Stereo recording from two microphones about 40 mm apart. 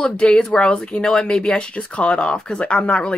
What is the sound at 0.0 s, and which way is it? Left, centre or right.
A woman's voice, left.